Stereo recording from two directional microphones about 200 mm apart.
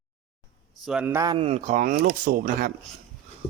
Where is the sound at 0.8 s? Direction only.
10° right (ahead or behind).